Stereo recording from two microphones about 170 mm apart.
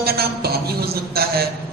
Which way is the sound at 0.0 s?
65° right (ahead or behind).